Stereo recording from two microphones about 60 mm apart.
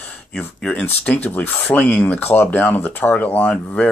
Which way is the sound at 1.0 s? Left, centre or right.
Left.